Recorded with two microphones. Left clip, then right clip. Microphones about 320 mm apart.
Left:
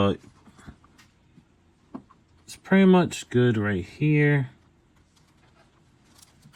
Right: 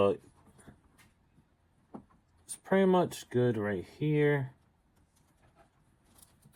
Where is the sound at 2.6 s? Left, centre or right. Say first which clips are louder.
Left 6 dB; left.